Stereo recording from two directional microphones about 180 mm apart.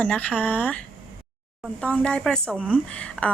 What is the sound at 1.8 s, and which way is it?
Speech, 5° left (ahead or behind).